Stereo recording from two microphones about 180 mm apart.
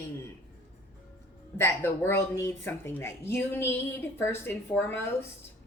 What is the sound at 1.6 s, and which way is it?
Speech, 15° left (ahead or behind).